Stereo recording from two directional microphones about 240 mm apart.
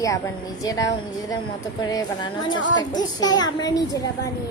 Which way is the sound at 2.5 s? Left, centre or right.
Left.